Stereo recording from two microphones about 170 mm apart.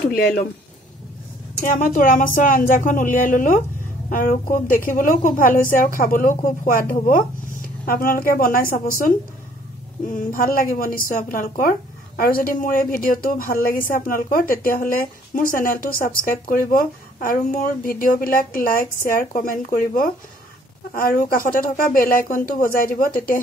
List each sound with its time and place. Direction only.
0.0 s speech: 65° left (ahead or behind)
1.6 s a woman's voice: 50° left (ahead or behind)